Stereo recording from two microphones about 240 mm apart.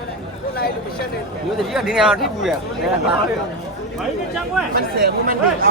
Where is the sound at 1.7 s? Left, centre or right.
Centre.